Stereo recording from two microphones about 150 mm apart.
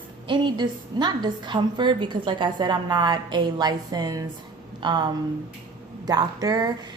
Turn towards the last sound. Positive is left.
turn(degrees=-25)  # may be behind; listen again after turning